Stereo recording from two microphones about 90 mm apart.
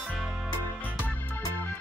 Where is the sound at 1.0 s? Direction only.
20° left (ahead or behind).